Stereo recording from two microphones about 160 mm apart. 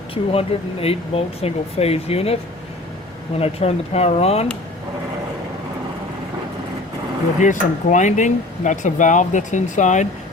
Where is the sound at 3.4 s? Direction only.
40° left (ahead or behind).